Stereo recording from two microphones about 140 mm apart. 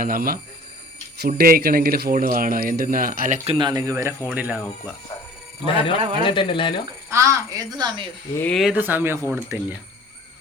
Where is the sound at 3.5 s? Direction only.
35° right (ahead or behind).